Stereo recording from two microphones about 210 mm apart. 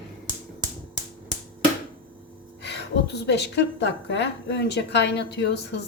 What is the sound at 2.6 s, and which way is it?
A woman's voice, 55° left (ahead or behind).